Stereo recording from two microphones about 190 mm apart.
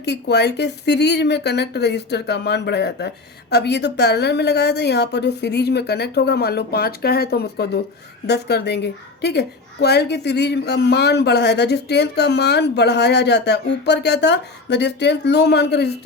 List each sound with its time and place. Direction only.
0.0 s a woman's voice: 60° left (ahead or behind)